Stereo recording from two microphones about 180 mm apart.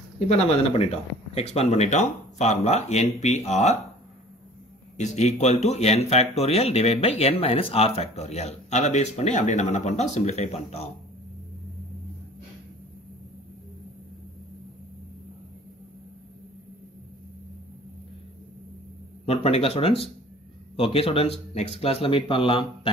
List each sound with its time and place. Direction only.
0.3 s speech: 35° left (ahead or behind)
4.9 s speech: 40° left (ahead or behind)
19.2 s speech: 35° left (ahead or behind)